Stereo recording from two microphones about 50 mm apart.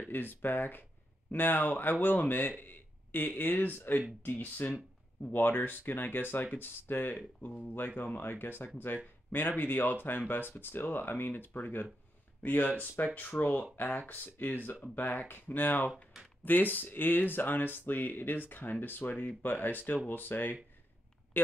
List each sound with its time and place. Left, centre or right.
0.1 s speech: left